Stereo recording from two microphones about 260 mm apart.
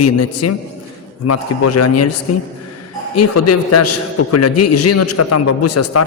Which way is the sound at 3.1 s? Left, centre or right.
Left.